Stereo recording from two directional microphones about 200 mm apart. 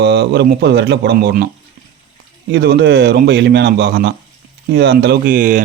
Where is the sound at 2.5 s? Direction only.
60° right (ahead or behind); by 5.6 s 40° right (ahead or behind).